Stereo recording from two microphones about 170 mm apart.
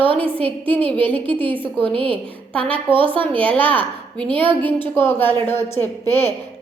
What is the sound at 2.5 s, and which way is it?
Speech, 10° left (ahead or behind).